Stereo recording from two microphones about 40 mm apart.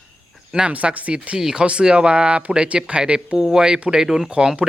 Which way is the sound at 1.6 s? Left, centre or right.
Right.